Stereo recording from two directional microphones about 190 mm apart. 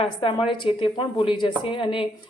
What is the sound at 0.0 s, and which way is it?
Speech, 25° left (ahead or behind).